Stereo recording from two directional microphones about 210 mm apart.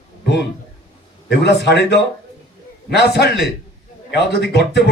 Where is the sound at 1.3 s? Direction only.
55° left (ahead or behind).